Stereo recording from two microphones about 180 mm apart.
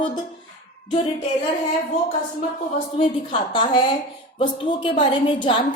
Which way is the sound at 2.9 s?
35° left (ahead or behind).